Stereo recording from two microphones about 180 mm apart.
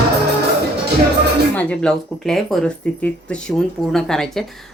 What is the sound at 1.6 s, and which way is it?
Speech, 5° left (ahead or behind).